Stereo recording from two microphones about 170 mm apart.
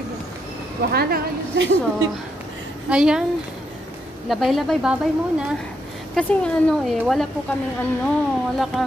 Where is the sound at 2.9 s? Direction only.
5° right (ahead or behind).